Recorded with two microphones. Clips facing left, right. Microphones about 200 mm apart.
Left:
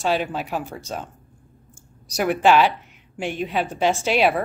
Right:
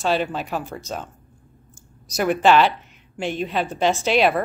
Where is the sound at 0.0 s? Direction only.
10° left (ahead or behind).